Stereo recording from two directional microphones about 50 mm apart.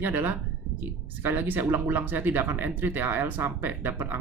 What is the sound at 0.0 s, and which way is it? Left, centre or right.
Speech, right.